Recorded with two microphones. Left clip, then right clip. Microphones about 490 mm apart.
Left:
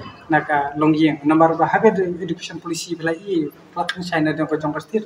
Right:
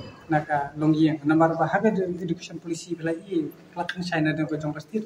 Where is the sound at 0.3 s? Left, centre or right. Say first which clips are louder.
Left 7 dB; right.